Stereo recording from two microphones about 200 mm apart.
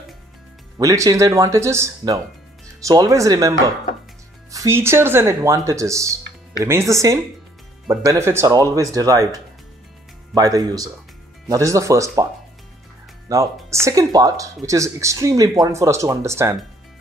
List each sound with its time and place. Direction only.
0.7 s speech: 15° right (ahead or behind)
13.3 s speech: 15° right (ahead or behind)